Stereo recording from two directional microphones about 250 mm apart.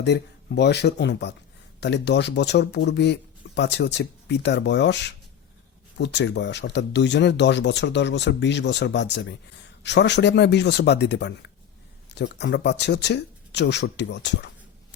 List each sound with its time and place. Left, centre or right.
0.0 s speech: left